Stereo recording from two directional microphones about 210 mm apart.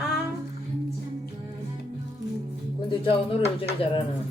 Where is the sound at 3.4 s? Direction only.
30° left (ahead or behind).